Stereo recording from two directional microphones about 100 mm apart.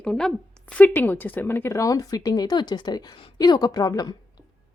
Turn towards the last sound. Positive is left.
turn(degrees=40)  # may be behind; listen again after turning